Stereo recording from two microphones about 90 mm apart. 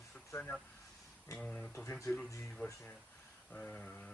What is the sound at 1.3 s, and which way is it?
Speech, 15° left (ahead or behind).